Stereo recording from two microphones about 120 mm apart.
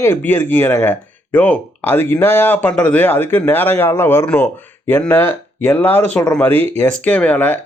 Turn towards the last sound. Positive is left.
turn(degrees=15)  # may be behind; listen again after turning